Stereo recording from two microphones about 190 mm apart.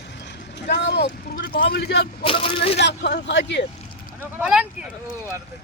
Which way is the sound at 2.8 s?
60° left (ahead or behind).